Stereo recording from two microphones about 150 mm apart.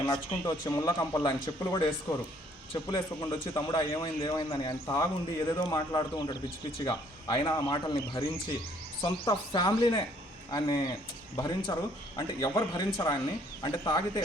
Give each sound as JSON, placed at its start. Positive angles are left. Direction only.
{"t": 0.0, "sound": "speech", "side_deg": 25}